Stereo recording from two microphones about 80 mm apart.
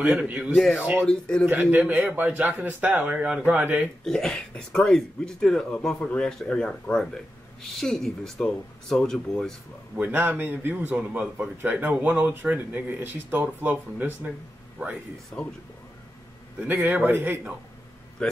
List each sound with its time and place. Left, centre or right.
0.2 s speech: centre
0.9 s speech: centre
1.4 s a man's voice: right
4.0 s speech: centre
9.9 s a man's voice: right
16.6 s a man's voice: right
18.2 s speech: centre